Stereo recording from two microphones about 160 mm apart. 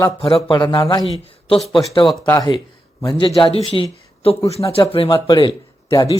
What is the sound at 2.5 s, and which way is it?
A man's voice, 30° left (ahead or behind).